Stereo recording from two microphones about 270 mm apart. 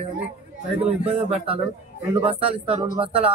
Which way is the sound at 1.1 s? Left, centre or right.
Right.